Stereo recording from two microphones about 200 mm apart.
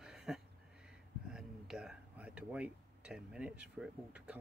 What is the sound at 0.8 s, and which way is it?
Speech, 5° right (ahead or behind).